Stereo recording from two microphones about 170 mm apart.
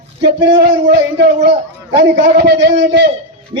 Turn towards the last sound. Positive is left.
turn(degrees=-90)